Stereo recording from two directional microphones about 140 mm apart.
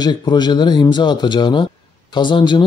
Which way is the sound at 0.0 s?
30° left (ahead or behind).